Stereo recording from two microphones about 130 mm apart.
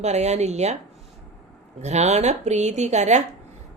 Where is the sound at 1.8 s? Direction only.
60° right (ahead or behind).